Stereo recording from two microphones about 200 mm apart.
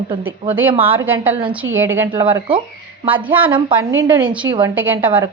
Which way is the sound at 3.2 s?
10° right (ahead or behind).